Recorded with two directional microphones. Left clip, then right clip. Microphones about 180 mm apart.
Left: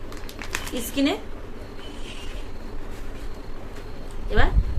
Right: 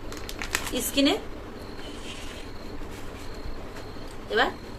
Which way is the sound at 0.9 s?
20° left (ahead or behind).